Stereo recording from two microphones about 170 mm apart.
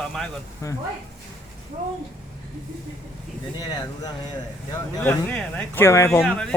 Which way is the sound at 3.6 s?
25° left (ahead or behind).